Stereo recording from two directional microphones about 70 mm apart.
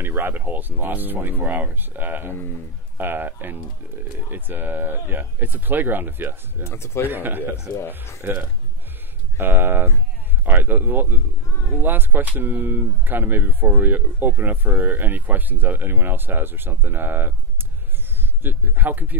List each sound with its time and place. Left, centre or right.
0.0 s speech: right
6.6 s speech: left
7.1 s speech: right